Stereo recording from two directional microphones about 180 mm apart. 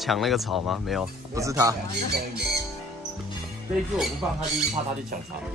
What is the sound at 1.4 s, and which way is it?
Speech, 20° right (ahead or behind).